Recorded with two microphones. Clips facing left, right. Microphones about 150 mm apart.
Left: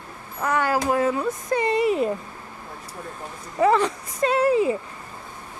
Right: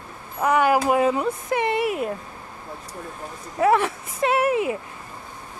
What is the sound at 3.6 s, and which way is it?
Speech, 5° right (ahead or behind).